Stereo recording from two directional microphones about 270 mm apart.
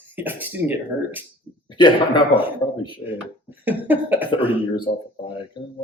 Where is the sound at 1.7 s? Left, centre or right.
Centre.